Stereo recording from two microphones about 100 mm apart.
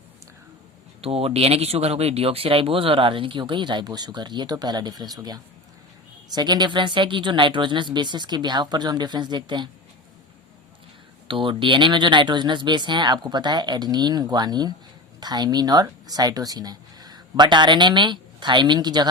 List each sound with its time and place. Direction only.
1.0 s speech: 80° right; by 9.6 s 45° right (ahead or behind)
11.3 s speech: 55° right (ahead or behind)